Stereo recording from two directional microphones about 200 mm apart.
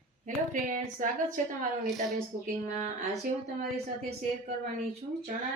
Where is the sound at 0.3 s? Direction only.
40° right (ahead or behind).